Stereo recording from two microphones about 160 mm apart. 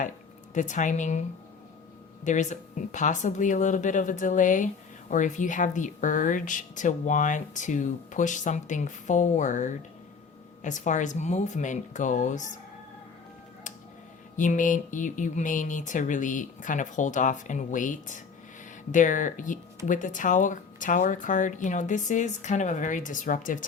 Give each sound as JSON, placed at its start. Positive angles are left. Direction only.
{"t": 0.5, "sound": "speech", "side_deg": 50}
{"t": 2.2, "sound": "speech", "side_deg": 50}
{"t": 14.3, "sound": "speech", "side_deg": 50}